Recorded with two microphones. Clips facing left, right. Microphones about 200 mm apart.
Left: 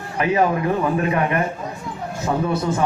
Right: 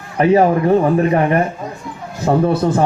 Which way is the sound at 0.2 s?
35° right (ahead or behind).